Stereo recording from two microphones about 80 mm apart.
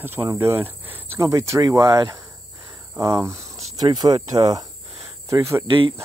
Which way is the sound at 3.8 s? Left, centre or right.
Right.